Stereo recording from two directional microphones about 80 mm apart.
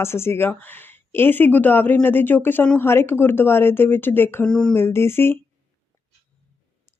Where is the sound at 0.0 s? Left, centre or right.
Left.